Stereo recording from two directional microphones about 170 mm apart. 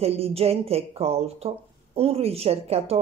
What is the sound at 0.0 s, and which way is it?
A woman's voice, 35° right (ahead or behind).